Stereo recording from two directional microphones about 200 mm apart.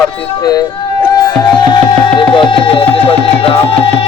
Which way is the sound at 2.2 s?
25° left (ahead or behind).